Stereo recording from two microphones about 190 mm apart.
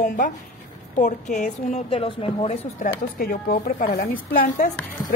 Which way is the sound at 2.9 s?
50° left (ahead or behind).